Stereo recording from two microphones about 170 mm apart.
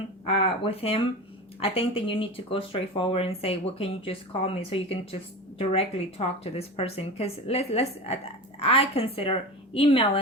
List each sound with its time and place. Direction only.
0.3 s speech: 35° left (ahead or behind)